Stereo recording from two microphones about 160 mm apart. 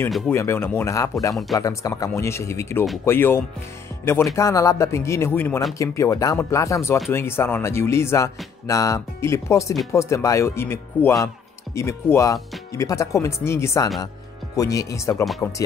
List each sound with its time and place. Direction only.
0.3 s speech: 15° left (ahead or behind)